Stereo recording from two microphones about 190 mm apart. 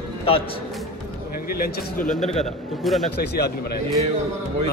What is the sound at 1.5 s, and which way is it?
Speech, 55° left (ahead or behind).